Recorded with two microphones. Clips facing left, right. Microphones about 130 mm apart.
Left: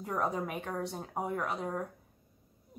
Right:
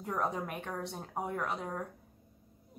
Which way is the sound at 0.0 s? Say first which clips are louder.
Left 1 dB; centre (ahead or behind).